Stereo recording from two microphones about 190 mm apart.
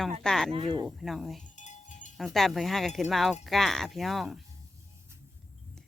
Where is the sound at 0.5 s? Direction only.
25° right (ahead or behind).